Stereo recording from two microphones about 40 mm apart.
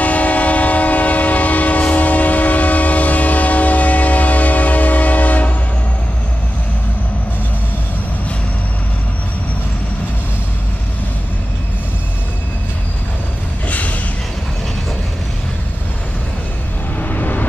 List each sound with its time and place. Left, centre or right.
0.0 s train: left
13.7 s a sound: left
17.0 s music: left